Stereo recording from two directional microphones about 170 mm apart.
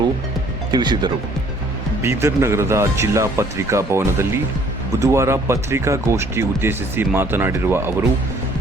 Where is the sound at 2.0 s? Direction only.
15° right (ahead or behind).